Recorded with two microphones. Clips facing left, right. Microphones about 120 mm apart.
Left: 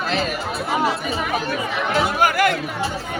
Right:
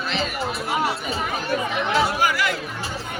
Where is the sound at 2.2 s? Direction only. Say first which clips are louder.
Left 5 dB; 50° left (ahead or behind).